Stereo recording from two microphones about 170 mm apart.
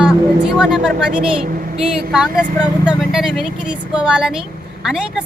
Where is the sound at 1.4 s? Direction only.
55° right (ahead or behind).